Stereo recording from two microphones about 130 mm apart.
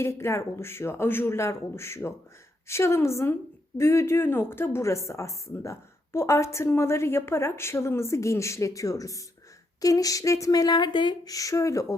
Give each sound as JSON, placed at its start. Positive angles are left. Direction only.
{"t": 0.0, "sound": "a woman's voice", "side_deg": 20}